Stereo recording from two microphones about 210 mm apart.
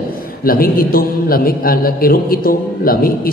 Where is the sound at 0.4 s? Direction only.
45° left (ahead or behind).